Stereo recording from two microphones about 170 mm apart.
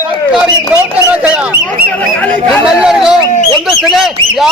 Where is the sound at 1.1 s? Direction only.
10° right (ahead or behind).